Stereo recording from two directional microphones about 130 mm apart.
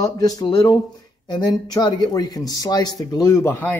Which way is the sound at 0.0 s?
30° left (ahead or behind).